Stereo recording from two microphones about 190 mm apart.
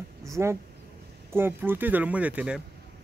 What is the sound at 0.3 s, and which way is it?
A man's voice, 15° right (ahead or behind).